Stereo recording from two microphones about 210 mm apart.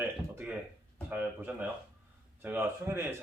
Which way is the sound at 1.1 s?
10° right (ahead or behind).